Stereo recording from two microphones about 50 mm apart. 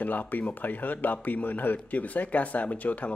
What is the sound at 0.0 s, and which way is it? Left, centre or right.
A man's voice, left.